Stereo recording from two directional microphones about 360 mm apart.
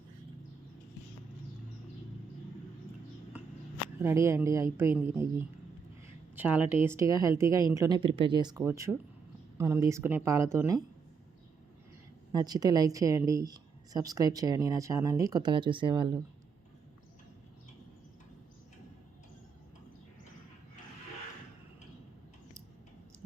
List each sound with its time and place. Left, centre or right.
4.0 s speech: centre
12.3 s speech: centre